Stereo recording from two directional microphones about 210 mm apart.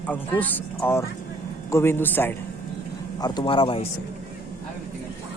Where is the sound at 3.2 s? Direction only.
20° left (ahead or behind).